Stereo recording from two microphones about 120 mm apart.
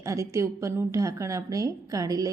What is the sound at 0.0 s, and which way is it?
A woman's voice, 25° right (ahead or behind).